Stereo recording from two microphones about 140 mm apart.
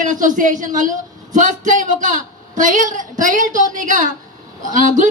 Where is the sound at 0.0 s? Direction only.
65° right (ahead or behind).